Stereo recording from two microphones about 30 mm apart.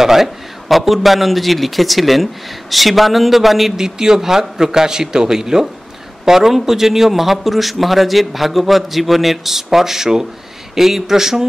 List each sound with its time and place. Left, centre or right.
0.0 s a man's voice: centre
0.7 s a man's voice: centre
3.7 s a man's voice: right